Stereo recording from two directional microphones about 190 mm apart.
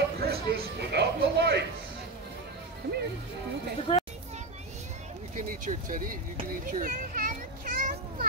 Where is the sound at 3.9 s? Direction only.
25° left (ahead or behind).